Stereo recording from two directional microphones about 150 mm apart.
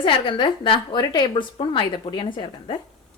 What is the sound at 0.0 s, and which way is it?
A woman's voice, 30° left (ahead or behind).